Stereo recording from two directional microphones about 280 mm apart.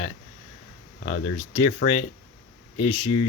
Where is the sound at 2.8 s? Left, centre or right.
Left.